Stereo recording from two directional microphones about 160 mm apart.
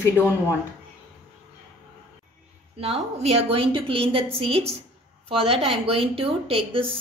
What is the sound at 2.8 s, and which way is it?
Speech, 40° right (ahead or behind).